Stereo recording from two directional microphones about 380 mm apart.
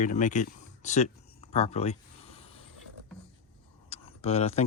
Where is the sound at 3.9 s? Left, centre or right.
Centre.